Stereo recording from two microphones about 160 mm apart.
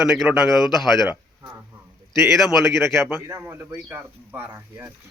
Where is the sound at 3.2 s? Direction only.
15° right (ahead or behind).